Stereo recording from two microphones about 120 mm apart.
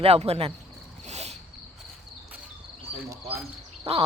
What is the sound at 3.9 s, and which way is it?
Speech, 60° right (ahead or behind).